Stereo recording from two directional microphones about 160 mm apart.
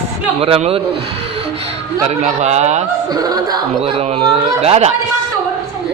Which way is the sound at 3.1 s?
25° right (ahead or behind).